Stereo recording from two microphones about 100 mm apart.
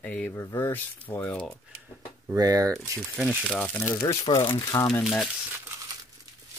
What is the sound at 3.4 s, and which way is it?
Speech, 10° left (ahead or behind).